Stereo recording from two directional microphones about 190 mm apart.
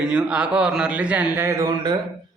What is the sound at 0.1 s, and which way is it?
A man's voice, 5° right (ahead or behind).